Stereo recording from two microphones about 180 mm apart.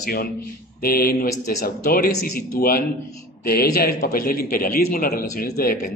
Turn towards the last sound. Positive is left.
turn(degrees=55)  # may be behind; listen again after turning